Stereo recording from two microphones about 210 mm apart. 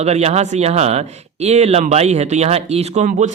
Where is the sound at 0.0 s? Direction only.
30° right (ahead or behind).